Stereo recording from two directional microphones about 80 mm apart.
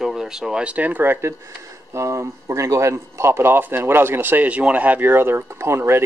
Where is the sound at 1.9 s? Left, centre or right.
Right.